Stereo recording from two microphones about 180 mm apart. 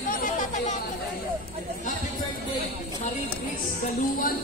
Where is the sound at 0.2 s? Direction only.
45° left (ahead or behind).